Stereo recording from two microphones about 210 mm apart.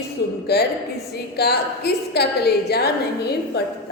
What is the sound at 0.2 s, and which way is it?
A woman's voice, 50° left (ahead or behind).